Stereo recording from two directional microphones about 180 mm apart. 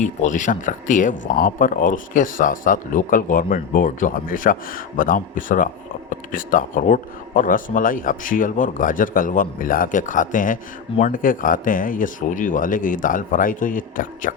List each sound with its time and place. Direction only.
0.0 s speech: 45° left (ahead or behind)